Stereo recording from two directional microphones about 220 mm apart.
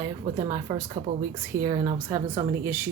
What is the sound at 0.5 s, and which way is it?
A woman's voice, 15° right (ahead or behind).